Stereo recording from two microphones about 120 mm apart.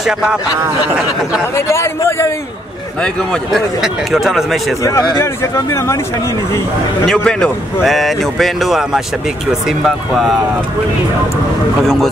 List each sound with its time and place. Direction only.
1.7 s speech: 25° left (ahead or behind)
3.0 s speech: 5° left (ahead or behind)
4.8 s speech: 25° left (ahead or behind)
7.1 s speech: 5° left (ahead or behind)
11.8 s speech: centre (ahead or behind)